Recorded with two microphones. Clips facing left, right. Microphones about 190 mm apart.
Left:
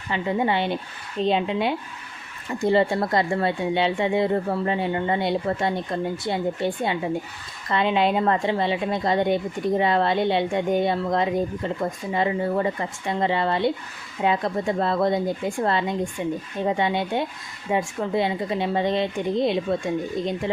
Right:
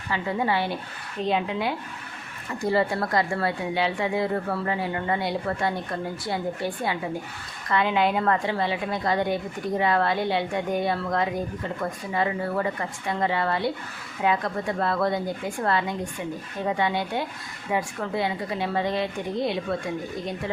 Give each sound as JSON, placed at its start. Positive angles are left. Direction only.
{"t": 0.1, "sound": "a woman's voice", "side_deg": 20}